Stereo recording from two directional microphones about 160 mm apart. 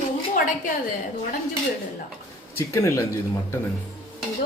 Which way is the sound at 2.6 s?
20° left (ahead or behind).